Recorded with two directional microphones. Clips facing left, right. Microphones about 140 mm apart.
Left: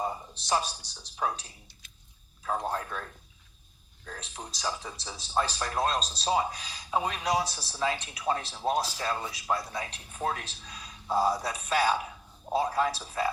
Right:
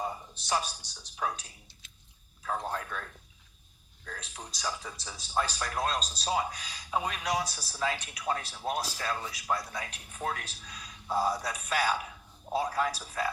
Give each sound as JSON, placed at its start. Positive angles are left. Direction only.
{"t": 0.0, "sound": "speech", "side_deg": 30}